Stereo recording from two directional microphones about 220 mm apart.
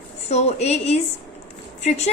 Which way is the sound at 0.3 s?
30° left (ahead or behind).